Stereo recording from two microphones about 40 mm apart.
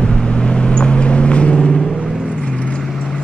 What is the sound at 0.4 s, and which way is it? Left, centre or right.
Vehicle, left.